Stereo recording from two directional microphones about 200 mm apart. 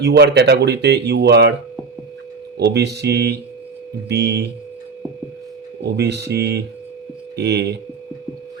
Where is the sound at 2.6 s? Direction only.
55° right (ahead or behind).